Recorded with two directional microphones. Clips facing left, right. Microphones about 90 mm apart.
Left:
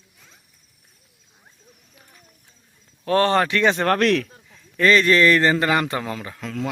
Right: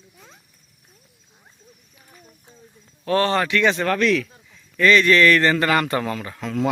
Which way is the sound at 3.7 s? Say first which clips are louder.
Left 2 dB; 50° left (ahead or behind).